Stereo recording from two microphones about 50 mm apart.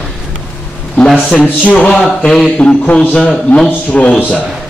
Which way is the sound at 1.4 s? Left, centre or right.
Left.